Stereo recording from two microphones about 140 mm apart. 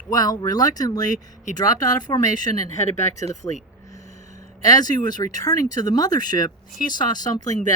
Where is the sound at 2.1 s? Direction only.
30° left (ahead or behind).